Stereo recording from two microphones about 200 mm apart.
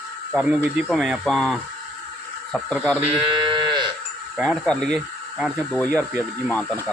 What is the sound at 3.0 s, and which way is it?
Sheep, 25° right (ahead or behind).